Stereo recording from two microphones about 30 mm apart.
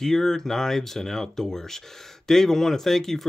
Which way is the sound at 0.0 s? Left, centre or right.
Centre.